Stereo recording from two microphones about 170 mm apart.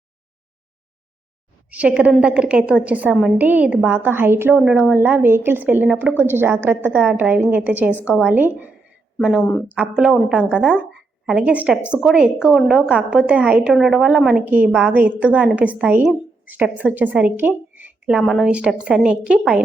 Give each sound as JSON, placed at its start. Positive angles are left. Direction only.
{"t": 1.7, "sound": "a woman's voice", "side_deg": -10}